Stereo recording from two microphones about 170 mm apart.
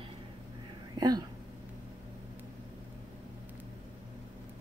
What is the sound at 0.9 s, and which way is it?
Speech, 25° right (ahead or behind).